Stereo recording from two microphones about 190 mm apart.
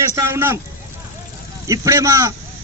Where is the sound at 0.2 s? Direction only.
15° right (ahead or behind).